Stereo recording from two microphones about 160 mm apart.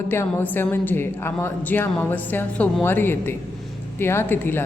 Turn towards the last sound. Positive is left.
turn(degrees=15)  # may be behind; listen again after turning